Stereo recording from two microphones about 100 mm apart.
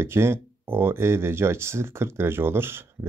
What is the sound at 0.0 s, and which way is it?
Speech, 25° right (ahead or behind).